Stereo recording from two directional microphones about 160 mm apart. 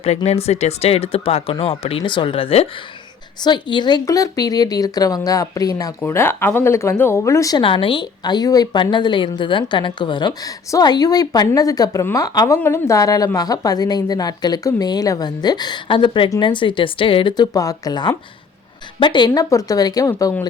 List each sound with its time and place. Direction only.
0.0 s a woman's voice: 40° left (ahead or behind); by 7.6 s 20° left (ahead or behind)
7.6 s a woman's voice: 35° left (ahead or behind)